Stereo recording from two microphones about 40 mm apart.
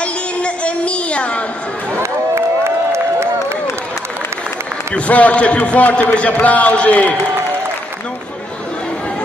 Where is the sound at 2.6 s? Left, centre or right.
Right.